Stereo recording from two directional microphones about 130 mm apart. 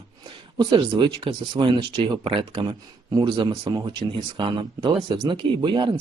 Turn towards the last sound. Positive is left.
turn(degrees=-40)  # may be behind; listen again after turning